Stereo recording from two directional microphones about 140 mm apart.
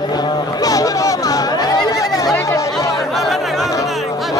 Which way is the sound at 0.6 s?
25° left (ahead or behind).